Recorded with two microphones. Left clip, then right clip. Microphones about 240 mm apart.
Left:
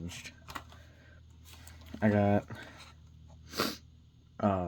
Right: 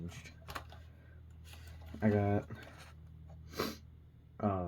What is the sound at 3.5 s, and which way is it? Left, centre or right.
Sneeze, left.